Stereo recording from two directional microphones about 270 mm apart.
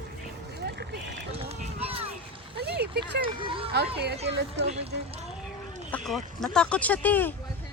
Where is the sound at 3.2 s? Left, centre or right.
Centre.